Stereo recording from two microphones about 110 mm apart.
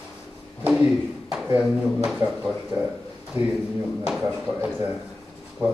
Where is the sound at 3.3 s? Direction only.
20° right (ahead or behind).